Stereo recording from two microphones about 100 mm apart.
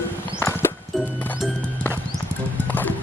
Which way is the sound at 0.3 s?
25° left (ahead or behind).